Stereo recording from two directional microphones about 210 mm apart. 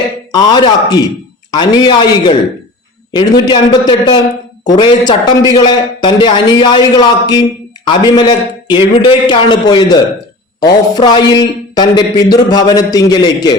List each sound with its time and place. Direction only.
0.3 s speech: 20° left (ahead or behind)